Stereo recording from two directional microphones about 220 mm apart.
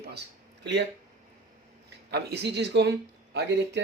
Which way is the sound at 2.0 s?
50° right (ahead or behind).